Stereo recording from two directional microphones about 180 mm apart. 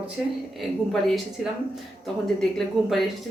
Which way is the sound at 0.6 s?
Centre (ahead or behind).